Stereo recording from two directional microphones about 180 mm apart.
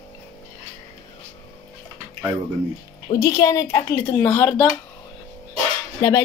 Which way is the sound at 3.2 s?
15° left (ahead or behind).